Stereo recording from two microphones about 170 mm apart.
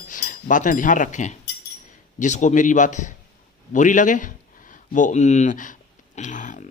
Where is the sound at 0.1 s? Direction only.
50° left (ahead or behind).